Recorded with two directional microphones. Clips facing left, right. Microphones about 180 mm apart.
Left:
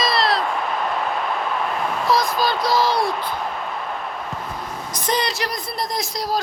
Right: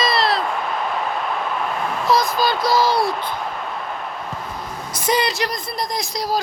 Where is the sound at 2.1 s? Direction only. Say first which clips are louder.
Right 2 dB; centre (ahead or behind).